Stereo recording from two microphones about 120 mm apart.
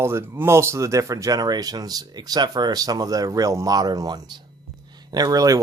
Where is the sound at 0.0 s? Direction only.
20° right (ahead or behind).